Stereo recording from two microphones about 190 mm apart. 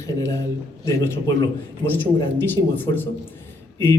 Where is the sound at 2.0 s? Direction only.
10° left (ahead or behind).